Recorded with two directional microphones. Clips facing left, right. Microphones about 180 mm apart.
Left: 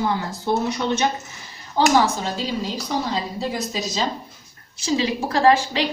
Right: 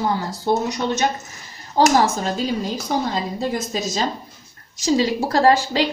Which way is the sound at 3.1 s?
50° right (ahead or behind).